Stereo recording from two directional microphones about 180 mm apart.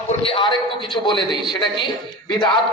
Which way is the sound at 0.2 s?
30° left (ahead or behind).